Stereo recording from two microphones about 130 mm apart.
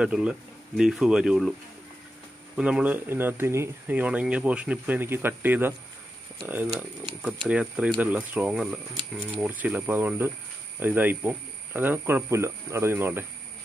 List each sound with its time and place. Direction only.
0.0 s speech: 5° right (ahead or behind)
2.5 s speech: 10° right (ahead or behind)